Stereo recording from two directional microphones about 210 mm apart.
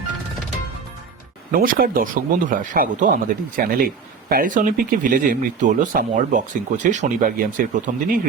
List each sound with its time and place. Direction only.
1.5 s speech: 45° right (ahead or behind)